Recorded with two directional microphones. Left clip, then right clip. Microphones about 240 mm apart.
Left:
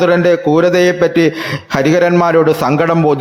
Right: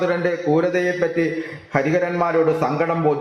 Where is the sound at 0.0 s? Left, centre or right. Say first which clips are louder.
Left 10 dB; left.